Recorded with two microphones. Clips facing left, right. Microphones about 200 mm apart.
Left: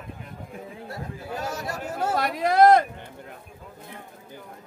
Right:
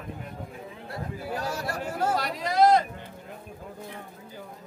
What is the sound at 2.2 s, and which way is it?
Speech, 55° left (ahead or behind).